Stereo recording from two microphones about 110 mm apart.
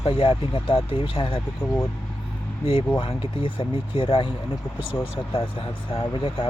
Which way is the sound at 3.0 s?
55° left (ahead or behind).